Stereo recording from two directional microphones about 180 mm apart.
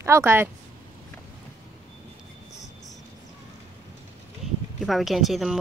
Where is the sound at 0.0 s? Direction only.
15° right (ahead or behind).